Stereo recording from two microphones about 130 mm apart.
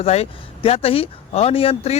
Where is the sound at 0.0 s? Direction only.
55° left (ahead or behind).